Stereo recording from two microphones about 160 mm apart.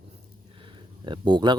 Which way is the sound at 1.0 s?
30° right (ahead or behind).